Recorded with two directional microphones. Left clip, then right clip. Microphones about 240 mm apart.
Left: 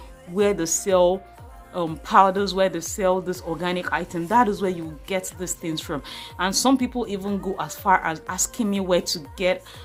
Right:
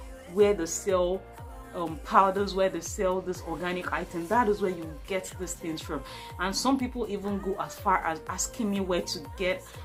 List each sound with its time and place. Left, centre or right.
0.3 s speech: left